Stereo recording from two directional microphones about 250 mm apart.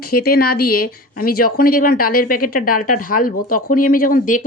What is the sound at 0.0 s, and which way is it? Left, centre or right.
A woman's voice, left.